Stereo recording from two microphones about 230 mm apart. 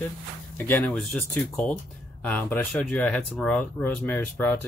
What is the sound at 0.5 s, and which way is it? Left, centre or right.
Speech, centre.